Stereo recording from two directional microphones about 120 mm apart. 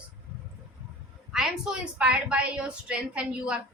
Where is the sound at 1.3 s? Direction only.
5° right (ahead or behind).